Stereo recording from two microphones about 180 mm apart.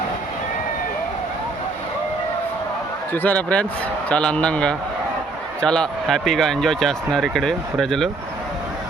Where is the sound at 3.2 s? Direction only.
5° left (ahead or behind).